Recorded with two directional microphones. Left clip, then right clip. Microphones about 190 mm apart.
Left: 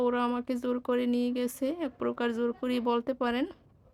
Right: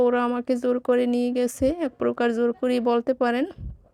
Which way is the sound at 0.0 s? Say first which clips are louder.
Right 7 dB; 25° right (ahead or behind).